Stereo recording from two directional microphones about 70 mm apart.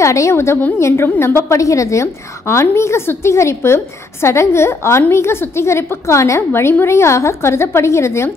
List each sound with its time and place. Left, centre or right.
0.0 s a woman's voice: left